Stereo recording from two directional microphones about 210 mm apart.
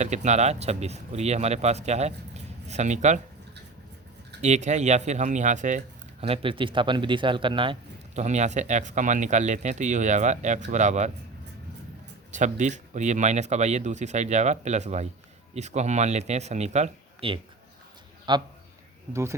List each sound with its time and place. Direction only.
0.0 s speech: 35° right (ahead or behind)
4.4 s speech: 35° right (ahead or behind)
12.3 s speech: 35° right (ahead or behind)